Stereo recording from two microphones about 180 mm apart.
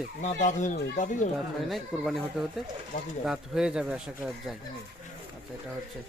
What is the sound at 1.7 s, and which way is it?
Speech, centre (ahead or behind).